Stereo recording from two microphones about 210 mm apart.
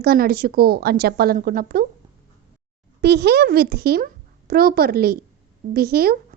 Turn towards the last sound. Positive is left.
turn(degrees=-45)  # may be behind; listen again after turning